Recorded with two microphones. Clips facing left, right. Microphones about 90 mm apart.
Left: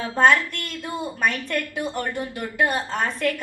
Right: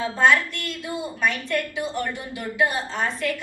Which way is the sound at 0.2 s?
50° left (ahead or behind).